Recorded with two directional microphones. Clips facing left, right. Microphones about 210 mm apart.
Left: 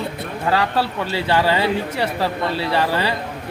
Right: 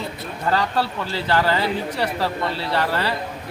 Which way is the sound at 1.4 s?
25° left (ahead or behind).